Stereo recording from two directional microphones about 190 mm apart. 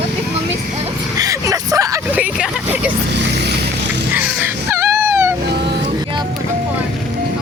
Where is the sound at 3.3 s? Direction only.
65° right (ahead or behind).